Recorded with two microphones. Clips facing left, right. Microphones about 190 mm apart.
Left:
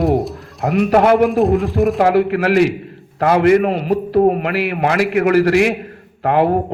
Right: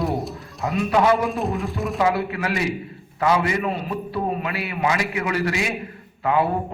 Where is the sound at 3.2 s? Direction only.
60° left (ahead or behind).